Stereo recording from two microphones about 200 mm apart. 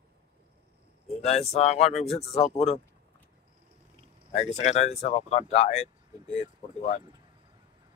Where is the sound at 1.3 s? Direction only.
30° left (ahead or behind).